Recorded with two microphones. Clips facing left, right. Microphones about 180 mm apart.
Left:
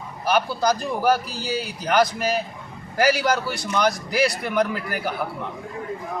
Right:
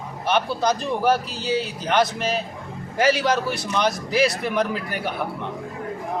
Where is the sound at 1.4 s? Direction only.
25° right (ahead or behind).